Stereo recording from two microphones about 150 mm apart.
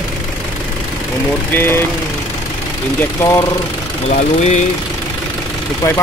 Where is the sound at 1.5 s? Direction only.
15° left (ahead or behind).